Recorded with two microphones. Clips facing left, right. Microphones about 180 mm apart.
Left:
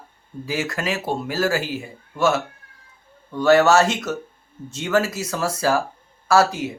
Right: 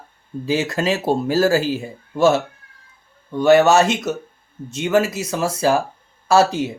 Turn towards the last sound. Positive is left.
turn(degrees=-25)  # may be behind; listen again after turning